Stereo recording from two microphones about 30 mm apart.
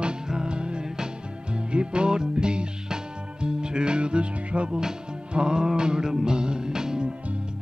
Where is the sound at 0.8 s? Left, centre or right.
Right.